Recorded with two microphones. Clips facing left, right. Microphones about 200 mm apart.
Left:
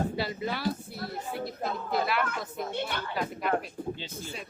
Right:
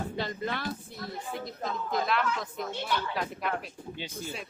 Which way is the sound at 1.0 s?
35° left (ahead or behind).